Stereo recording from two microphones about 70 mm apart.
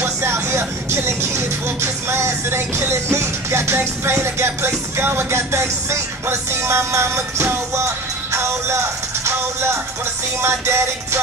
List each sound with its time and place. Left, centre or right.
0.0 s speech: right
2.9 s music: right
10.4 s music: right